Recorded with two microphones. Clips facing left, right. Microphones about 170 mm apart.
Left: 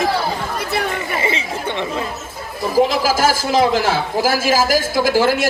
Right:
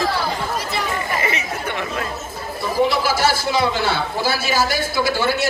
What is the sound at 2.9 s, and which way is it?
Speech, 90° left.